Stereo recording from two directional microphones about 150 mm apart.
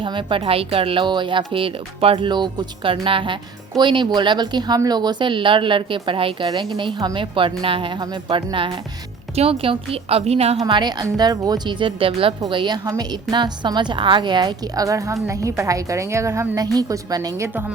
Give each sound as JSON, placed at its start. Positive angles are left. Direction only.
{"t": 0.0, "sound": "speech", "side_deg": -35}
{"t": 10.6, "sound": "a woman's voice", "side_deg": -30}